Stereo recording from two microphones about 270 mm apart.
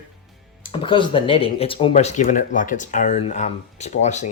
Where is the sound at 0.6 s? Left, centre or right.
Centre.